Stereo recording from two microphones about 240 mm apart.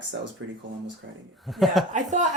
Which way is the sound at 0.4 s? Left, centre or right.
Right.